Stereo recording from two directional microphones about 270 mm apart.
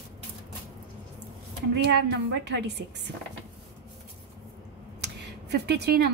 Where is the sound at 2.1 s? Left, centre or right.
Right.